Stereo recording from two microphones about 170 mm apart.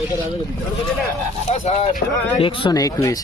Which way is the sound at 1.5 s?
40° left (ahead or behind).